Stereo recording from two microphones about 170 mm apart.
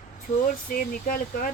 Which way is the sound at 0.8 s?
55° left (ahead or behind).